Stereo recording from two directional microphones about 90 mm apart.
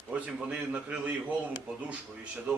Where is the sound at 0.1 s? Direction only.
15° right (ahead or behind).